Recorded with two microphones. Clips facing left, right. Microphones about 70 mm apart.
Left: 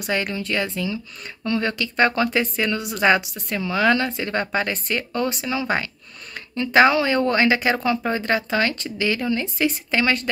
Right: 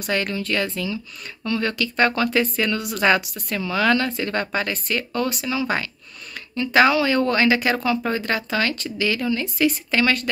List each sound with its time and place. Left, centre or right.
0.0 s speech: centre